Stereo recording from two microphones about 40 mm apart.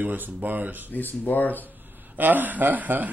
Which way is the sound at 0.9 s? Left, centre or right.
Left.